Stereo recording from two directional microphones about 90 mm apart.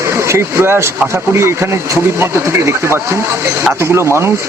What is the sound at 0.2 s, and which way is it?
Speech, 30° right (ahead or behind).